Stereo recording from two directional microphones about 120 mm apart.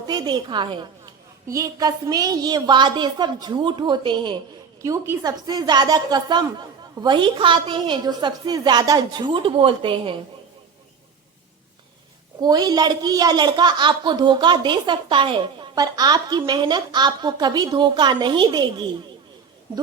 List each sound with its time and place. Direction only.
0.1 s a woman's voice: 35° right (ahead or behind)
1.5 s a woman's voice: 30° right (ahead or behind)
4.8 s a woman's voice: 25° right (ahead or behind); by 10.2 s 45° right (ahead or behind)
12.4 s a woman's voice: 35° right (ahead or behind)